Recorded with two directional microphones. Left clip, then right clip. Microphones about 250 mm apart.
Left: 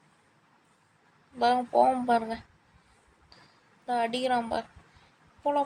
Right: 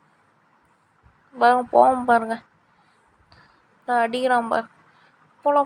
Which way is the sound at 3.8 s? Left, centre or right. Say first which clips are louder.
Right 7 dB; centre.